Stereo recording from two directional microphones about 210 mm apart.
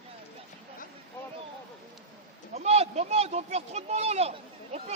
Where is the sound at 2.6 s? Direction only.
30° right (ahead or behind).